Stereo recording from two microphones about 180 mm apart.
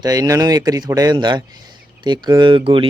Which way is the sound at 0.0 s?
20° right (ahead or behind).